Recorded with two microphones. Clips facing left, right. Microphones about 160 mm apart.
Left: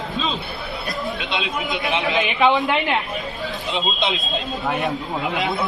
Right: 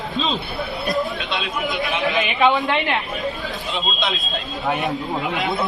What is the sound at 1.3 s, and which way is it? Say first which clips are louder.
A man's voice: right 2 dB; 20° left (ahead or behind).